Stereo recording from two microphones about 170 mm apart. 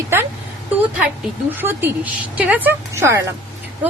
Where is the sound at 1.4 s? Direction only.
10° right (ahead or behind).